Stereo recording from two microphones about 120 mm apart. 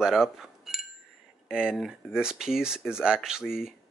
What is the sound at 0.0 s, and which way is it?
Speech, 5° right (ahead or behind).